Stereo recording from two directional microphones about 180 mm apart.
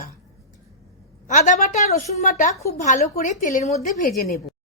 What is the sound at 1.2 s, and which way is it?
A woman's voice, 45° left (ahead or behind).